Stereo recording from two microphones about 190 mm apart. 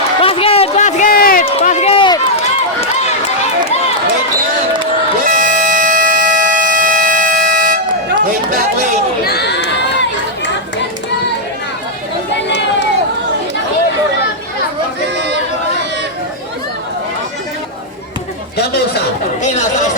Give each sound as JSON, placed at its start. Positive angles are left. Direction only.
{"t": 0.2, "sound": "run", "side_deg": 30}
{"t": 1.5, "sound": "run", "side_deg": 35}
{"t": 5.4, "sound": "civil defense siren", "side_deg": -45}
{"t": 8.4, "sound": "a sound", "side_deg": -45}
{"t": 9.2, "sound": "crowd", "side_deg": 60}
{"t": 12.5, "sound": "crowd", "side_deg": 65}
{"t": 19.4, "sound": "chatter", "side_deg": 40}